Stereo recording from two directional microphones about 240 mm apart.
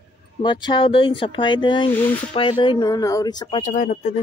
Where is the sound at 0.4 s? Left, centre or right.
Centre.